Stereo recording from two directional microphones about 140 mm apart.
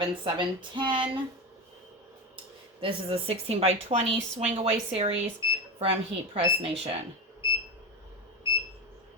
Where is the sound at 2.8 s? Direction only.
40° right (ahead or behind).